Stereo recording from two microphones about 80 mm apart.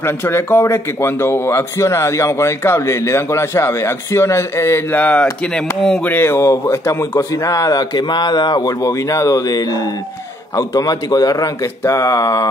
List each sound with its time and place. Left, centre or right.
0.0 s speech: left
4.9 s speech: centre
6.0 s speech: left
8.8 s speech: left